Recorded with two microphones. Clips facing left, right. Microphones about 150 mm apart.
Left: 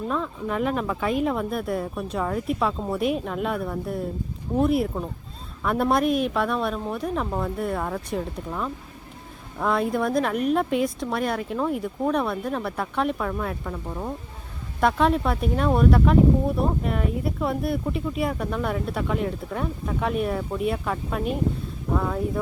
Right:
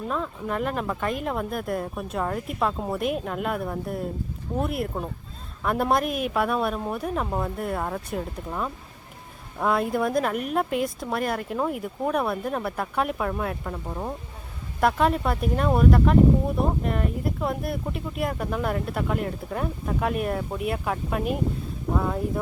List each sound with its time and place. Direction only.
0.1 s speech: centre (ahead or behind)
13.8 s speech: 15° right (ahead or behind)
14.8 s speech: centre (ahead or behind)